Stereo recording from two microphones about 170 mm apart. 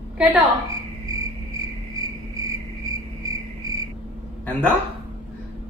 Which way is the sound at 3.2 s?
20° right (ahead or behind).